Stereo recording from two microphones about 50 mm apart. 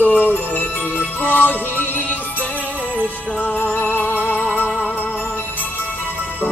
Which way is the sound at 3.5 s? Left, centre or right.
Left.